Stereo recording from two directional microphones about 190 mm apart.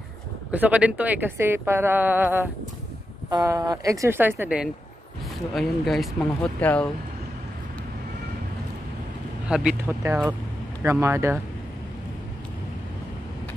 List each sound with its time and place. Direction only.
0.5 s a woman's voice: 10° right (ahead or behind)
9.5 s a woman's voice: 5° right (ahead or behind)